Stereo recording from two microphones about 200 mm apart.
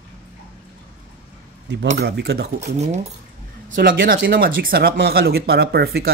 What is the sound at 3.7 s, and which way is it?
Speech, 45° right (ahead or behind).